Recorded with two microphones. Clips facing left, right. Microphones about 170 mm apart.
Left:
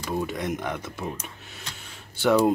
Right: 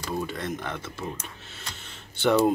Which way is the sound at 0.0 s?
15° left (ahead or behind).